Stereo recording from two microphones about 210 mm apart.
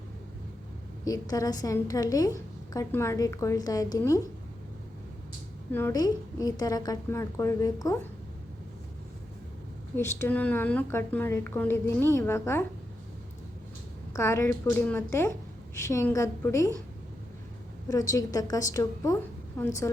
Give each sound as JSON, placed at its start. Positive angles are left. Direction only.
{"t": 1.0, "sound": "a woman's voice", "side_deg": 15}
{"t": 5.7, "sound": "a woman's voice", "side_deg": 15}
{"t": 9.9, "sound": "a woman's voice", "side_deg": 10}
{"t": 14.1, "sound": "a woman's voice", "side_deg": 15}
{"t": 17.8, "sound": "a woman's voice", "side_deg": 15}